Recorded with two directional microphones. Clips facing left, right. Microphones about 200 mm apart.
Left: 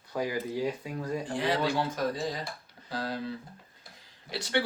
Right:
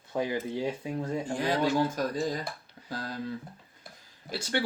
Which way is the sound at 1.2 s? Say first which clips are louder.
Right 1 dB; 45° right (ahead or behind).